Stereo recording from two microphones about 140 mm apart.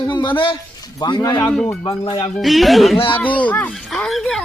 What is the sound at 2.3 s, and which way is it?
Speech, centre (ahead or behind).